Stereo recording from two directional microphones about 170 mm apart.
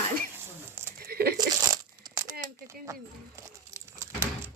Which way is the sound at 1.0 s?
65° right (ahead or behind).